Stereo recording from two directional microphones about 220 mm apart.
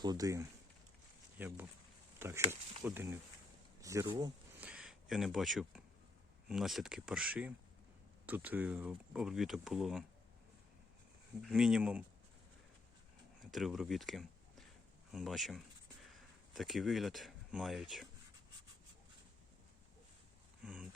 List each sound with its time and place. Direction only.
0.0 s speech: 15° right (ahead or behind)
4.6 s speech: 5° right (ahead or behind)
11.4 s speech: 5° right (ahead or behind)
13.5 s speech: centre (ahead or behind)
20.6 s a sound: 5° right (ahead or behind)